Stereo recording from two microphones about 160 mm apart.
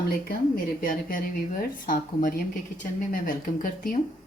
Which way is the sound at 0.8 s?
60° left (ahead or behind).